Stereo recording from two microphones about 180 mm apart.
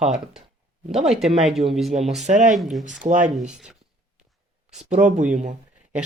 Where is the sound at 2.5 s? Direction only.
Centre (ahead or behind).